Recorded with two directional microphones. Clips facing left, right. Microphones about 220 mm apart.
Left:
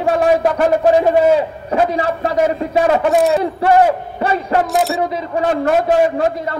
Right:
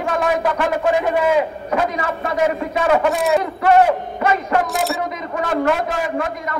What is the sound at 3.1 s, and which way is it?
Speech, centre (ahead or behind).